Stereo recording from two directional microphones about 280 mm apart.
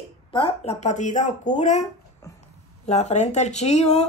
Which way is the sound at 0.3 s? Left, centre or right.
Centre.